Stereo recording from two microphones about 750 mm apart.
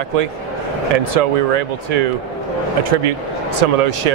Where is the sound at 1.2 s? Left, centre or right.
Right.